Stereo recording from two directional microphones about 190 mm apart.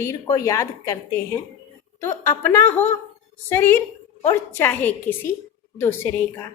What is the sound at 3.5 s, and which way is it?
A woman's voice, 10° left (ahead or behind).